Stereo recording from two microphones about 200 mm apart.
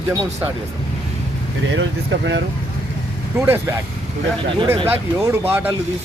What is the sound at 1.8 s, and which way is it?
Speech, 65° right (ahead or behind).